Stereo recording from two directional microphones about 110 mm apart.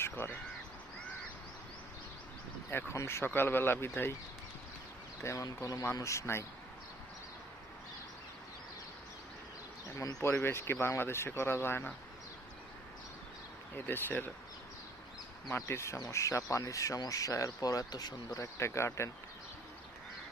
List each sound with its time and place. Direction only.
0.0 s crow: 20° left (ahead or behind)
2.6 s speech: 25° left (ahead or behind)
5.2 s speech: 30° left (ahead or behind)
10.0 s speech: 30° left (ahead or behind)
13.7 s speech: 20° left (ahead or behind)
15.5 s speech: 25° left (ahead or behind)